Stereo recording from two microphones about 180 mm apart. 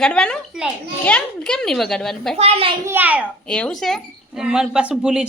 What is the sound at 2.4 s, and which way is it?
Speech, 30° right (ahead or behind).